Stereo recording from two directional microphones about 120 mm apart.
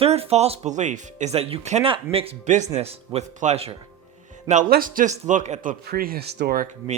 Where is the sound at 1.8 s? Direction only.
50° right (ahead or behind).